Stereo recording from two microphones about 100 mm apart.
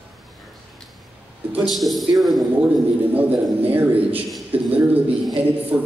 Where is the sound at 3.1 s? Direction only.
15° right (ahead or behind).